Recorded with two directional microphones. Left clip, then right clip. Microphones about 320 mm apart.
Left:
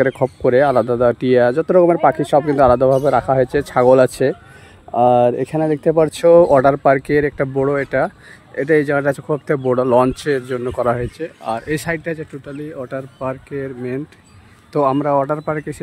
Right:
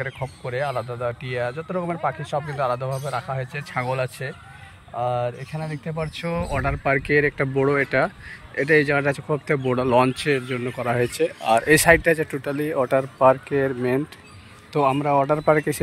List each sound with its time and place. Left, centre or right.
1.1 s speech: left; by 14.0 s centre
14.7 s speech: centre